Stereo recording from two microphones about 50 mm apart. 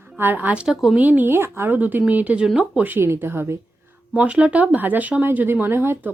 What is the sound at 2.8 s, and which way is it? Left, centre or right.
Speech, right.